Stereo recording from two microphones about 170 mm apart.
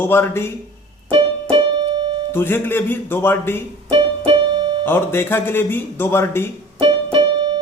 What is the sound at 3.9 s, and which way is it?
Music, 30° right (ahead or behind).